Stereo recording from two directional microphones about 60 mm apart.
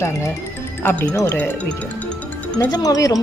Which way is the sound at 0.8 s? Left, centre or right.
Left.